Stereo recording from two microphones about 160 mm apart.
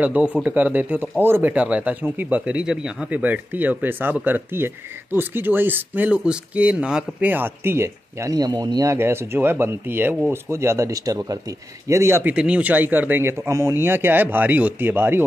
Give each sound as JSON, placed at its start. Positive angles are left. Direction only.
{"t": 0.0, "sound": "speech", "side_deg": -10}